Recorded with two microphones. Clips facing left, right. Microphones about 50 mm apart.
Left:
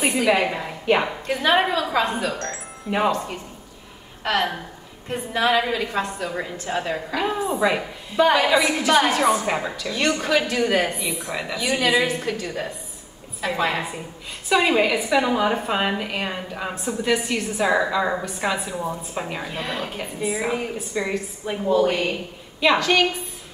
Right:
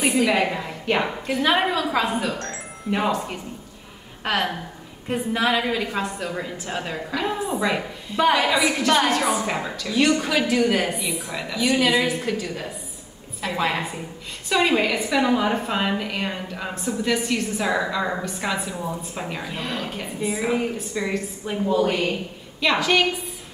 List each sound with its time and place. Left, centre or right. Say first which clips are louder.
0.1 s a woman's voice: even; centre
2.4 s music: even; centre
4.2 s a woman's voice: left 1 dB; centre